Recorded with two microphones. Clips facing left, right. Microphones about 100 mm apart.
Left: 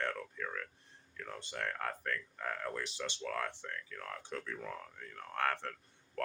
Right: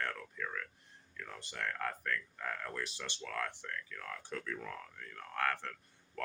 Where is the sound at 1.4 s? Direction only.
25° left (ahead or behind).